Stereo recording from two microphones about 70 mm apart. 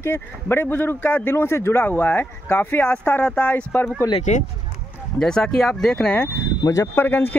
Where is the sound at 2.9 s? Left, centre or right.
Left.